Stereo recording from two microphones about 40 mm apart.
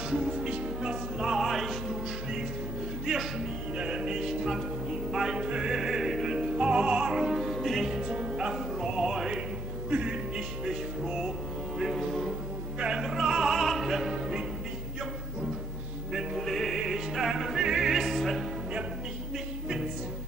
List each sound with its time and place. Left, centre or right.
0.4 s music: right
1.5 s music: centre
3.1 s music: centre
3.7 s music: right
7.3 s music: centre
7.9 s music: right
11.8 s music: centre
12.7 s opera: right
13.6 s opera: centre
16.3 s music: centre
16.8 s music: centre